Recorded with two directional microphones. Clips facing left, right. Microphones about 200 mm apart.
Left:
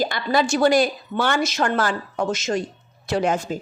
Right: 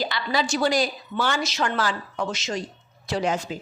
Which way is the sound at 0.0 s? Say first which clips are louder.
Left 5 dB; 50° left (ahead or behind).